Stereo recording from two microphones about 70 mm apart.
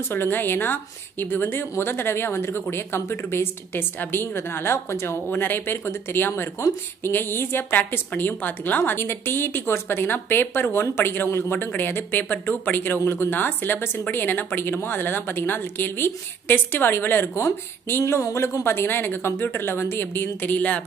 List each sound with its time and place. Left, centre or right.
0.1 s a woman's voice: left
20.5 s a woman's voice: left